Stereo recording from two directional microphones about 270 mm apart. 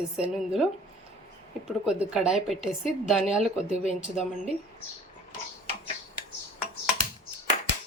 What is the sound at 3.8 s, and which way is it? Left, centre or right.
Speech, left.